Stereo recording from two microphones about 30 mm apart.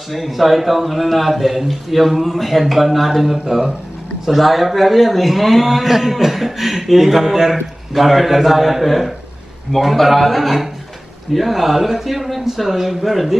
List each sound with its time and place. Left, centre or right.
0.1 s a man's voice: centre
3.3 s speech: centre
4.3 s a man's voice: centre